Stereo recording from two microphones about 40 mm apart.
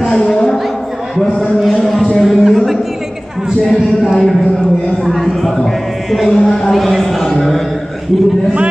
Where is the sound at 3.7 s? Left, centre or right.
Centre.